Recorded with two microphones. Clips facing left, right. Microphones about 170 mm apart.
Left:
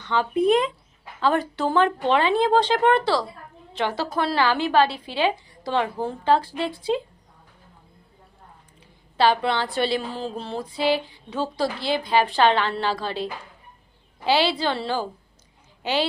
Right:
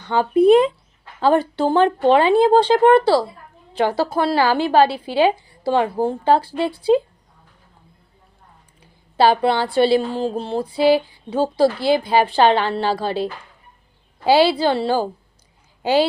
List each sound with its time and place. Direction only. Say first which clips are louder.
0.1 s a woman's voice: right 7 dB; 35° right (ahead or behind)
9.1 s a woman's voice: right 5 dB; 35° right (ahead or behind)
14.4 s a woman's voice: right 7 dB; 35° right (ahead or behind)